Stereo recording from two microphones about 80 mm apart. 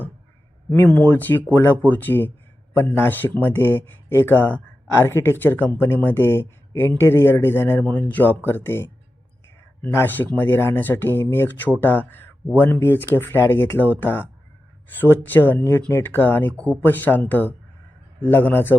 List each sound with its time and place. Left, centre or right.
0.9 s speech: left
9.9 s speech: left